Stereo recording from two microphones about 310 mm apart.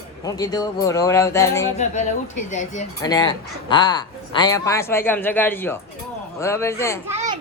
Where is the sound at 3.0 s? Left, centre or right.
Centre.